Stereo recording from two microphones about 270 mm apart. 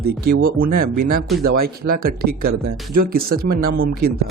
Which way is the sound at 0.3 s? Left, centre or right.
Right.